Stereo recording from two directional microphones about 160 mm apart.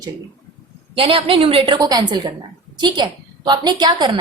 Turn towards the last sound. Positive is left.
turn(degrees=-25)  # may be behind; listen again after turning